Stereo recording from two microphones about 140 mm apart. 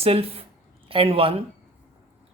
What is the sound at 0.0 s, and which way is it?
Speech, 45° right (ahead or behind).